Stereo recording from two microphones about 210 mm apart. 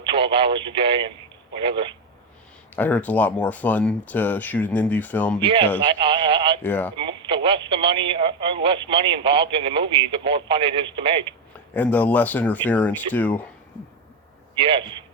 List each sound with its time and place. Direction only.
0.0 s speech: 25° right (ahead or behind)
2.7 s speech: 10° left (ahead or behind)
5.4 s speech: 25° right (ahead or behind)
6.6 s speech: 10° left (ahead or behind)
6.9 s speech: 25° right (ahead or behind)
11.7 s speech: 10° left (ahead or behind)
14.6 s speech: 25° right (ahead or behind)